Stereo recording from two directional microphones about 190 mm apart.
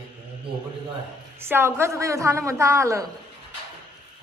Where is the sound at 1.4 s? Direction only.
15° right (ahead or behind).